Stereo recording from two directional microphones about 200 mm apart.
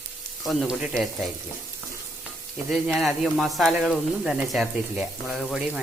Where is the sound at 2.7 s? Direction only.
Centre (ahead or behind).